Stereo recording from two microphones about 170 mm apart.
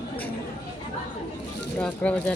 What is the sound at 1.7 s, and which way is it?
Speech, 10° left (ahead or behind).